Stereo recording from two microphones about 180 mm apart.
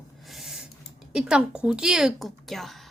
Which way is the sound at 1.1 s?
5° right (ahead or behind).